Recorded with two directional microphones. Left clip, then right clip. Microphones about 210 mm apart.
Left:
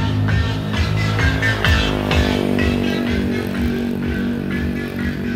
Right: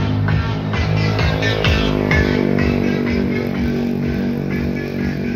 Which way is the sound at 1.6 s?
45° right (ahead or behind).